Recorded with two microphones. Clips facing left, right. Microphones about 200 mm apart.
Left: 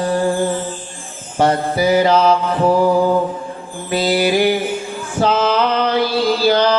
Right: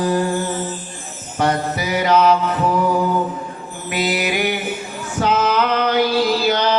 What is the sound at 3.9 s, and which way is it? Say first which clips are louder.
Mantra: left 5 dB; 30° left (ahead or behind).